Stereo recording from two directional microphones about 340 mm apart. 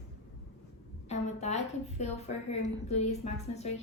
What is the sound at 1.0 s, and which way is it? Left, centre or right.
A woman's voice, centre.